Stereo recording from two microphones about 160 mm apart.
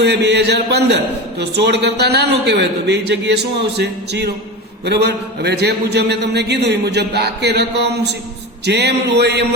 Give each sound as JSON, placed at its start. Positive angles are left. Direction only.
{"t": 0.0, "sound": "speech", "side_deg": -90}